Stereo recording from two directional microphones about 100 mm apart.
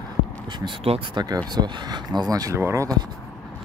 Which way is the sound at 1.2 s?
45° right (ahead or behind).